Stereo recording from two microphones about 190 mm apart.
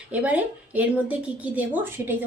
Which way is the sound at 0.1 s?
5° right (ahead or behind).